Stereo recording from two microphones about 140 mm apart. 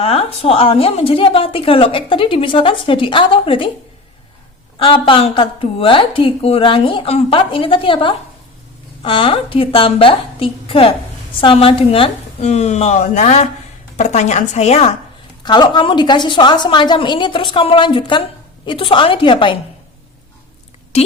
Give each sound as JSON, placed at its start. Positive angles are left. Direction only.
{"t": 0.0, "sound": "a woman's voice", "side_deg": 45}
{"t": 4.8, "sound": "a woman's voice", "side_deg": 40}
{"t": 15.4, "sound": "a woman's voice", "side_deg": 30}
{"t": 20.9, "sound": "a woman's voice", "side_deg": 50}